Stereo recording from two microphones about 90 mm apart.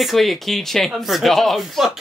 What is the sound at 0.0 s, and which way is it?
Speech, centre (ahead or behind).